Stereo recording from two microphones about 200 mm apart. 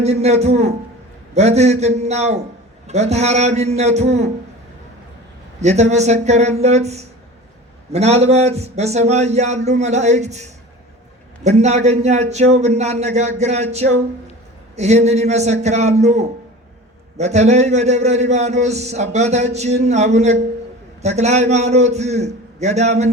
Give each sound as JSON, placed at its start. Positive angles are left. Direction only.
{"t": 0.0, "sound": "speech", "side_deg": -35}
{"t": 5.5, "sound": "speech", "side_deg": -35}